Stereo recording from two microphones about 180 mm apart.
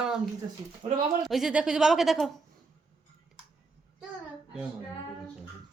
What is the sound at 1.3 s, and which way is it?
A woman's voice, centre (ahead or behind).